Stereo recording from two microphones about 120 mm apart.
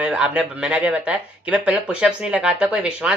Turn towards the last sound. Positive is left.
turn(degrees=-10)  # may be behind; listen again after turning